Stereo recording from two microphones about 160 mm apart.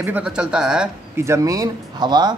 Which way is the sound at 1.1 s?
15° right (ahead or behind).